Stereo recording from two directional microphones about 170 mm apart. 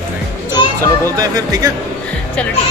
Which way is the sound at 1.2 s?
20° right (ahead or behind).